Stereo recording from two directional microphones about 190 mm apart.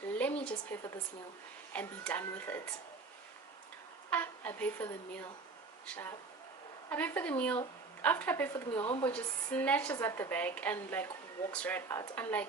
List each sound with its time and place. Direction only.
0.1 s a sound: 5° left (ahead or behind)
0.4 s a woman's voice: 10° left (ahead or behind)
4.1 s a woman's voice: 10° left (ahead or behind)
8.8 s speech: 30° left (ahead or behind)
9.1 s a woman's voice: 5° left (ahead or behind)